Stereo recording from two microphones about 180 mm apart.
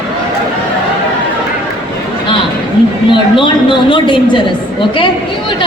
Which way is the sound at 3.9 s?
25° left (ahead or behind).